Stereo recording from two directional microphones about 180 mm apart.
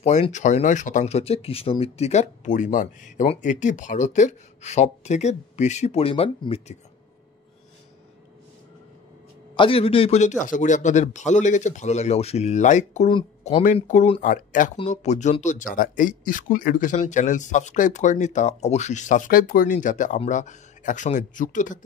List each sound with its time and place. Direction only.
0.0 s speech: 40° left (ahead or behind)
9.6 s speech: 30° left (ahead or behind)
13.1 s speech: 30° left (ahead or behind)
13.8 s speech: 45° left (ahead or behind)